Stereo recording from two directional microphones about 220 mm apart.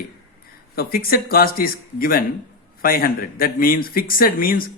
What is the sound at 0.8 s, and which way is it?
Speech, 40° left (ahead or behind).